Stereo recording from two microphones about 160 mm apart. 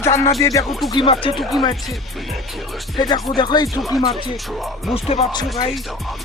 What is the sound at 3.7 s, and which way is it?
Speech, centre (ahead or behind).